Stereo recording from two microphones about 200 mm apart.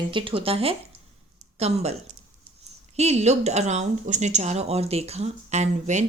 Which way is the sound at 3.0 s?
35° right (ahead or behind).